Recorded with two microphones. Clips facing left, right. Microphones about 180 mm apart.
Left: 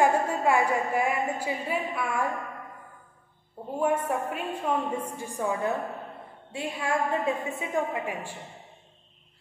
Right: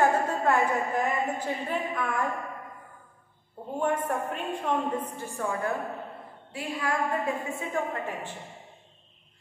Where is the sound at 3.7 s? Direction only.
10° left (ahead or behind).